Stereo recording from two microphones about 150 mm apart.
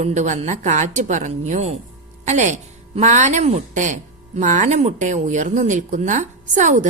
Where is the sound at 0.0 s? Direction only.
50° right (ahead or behind).